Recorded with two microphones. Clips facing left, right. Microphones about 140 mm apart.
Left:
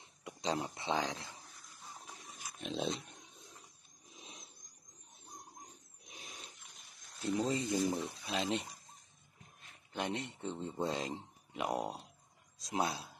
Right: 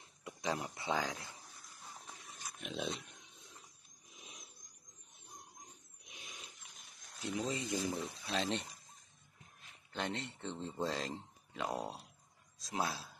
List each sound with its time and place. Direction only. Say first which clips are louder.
0.2 s speech: left 2 dB; 25° left (ahead or behind)
2.3 s dog: even; 5° left (ahead or behind)
2.6 s speech: left 3 dB; 30° left (ahead or behind)
4.2 s a sound: left 2 dB; 30° left (ahead or behind)
6.0 s a sound: left 2 dB; 40° left (ahead or behind)
6.4 s a sound: left 1 dB; centre (ahead or behind)
7.3 s speech: left 4 dB; 30° left (ahead or behind)
8.3 s speech: left 1 dB; 5° left (ahead or behind)
9.9 s speech: left 2 dB; 15° left (ahead or behind)